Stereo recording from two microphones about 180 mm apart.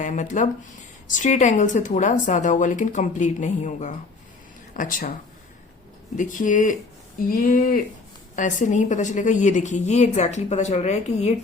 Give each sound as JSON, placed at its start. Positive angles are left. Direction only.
{"t": 0.0, "sound": "a woman's voice", "side_deg": 45}
{"t": 6.1, "sound": "a woman's voice", "side_deg": 45}